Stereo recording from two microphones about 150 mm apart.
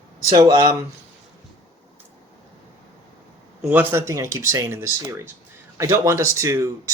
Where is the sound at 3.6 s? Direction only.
10° right (ahead or behind).